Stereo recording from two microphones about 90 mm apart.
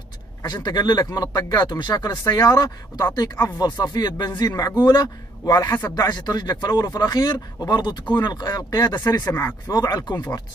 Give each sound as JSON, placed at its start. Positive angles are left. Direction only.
{"t": 0.4, "sound": "speech", "side_deg": 50}
{"t": 2.2, "sound": "speech", "side_deg": 45}